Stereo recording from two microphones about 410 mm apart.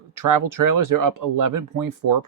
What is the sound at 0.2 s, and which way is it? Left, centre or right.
Speech, right.